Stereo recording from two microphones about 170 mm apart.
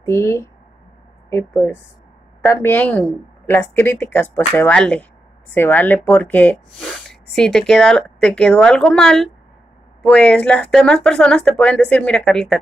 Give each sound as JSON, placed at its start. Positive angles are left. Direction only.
{"t": 0.0, "sound": "speech", "side_deg": 15}